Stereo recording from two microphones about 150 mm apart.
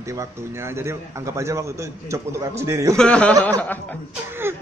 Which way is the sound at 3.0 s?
5° left (ahead or behind).